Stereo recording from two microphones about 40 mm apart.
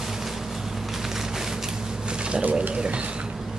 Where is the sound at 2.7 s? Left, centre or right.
Right.